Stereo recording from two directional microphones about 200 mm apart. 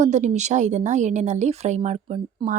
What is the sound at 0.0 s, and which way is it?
A woman's voice, 35° right (ahead or behind).